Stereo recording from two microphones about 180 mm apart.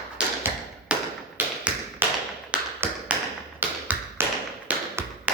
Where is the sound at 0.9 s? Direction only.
5° right (ahead or behind).